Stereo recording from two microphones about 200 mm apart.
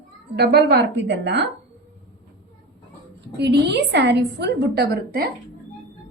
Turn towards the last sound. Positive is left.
turn(degrees=-50)  # may be behind; listen again after turning